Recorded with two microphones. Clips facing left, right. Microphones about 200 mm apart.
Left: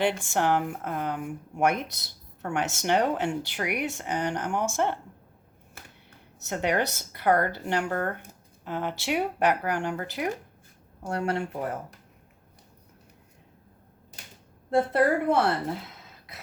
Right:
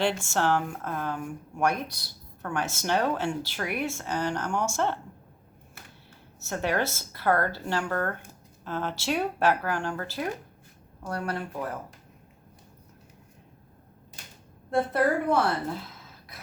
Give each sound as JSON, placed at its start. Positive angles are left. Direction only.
{"t": 0.3, "sound": "speech", "side_deg": 15}
{"t": 6.4, "sound": "speech", "side_deg": 20}
{"t": 14.7, "sound": "speech", "side_deg": 25}